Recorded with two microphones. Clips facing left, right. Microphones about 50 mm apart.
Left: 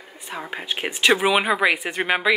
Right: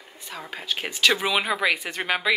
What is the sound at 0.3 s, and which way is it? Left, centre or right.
Speech, left.